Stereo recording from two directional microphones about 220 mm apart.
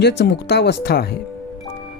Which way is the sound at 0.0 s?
50° left (ahead or behind).